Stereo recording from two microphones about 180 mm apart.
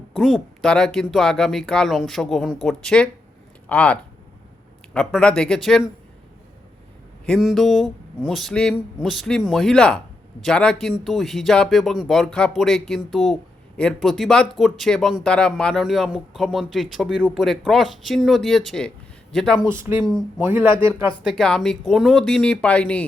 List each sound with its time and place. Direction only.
0.1 s speech: centre (ahead or behind)
4.9 s speech: 5° left (ahead or behind)
7.3 s speech: centre (ahead or behind)
19.6 s speech: 15° right (ahead or behind)
20.7 s speech: 30° left (ahead or behind)
21.2 s speech: 5° left (ahead or behind)